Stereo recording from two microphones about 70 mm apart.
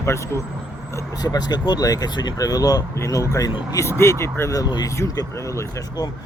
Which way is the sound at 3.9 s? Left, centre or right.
Left.